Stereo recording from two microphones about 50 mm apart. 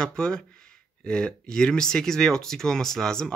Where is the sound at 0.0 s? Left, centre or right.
Centre.